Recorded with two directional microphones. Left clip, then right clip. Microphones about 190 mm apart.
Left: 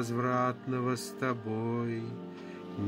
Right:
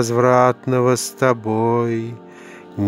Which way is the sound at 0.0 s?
50° right (ahead or behind).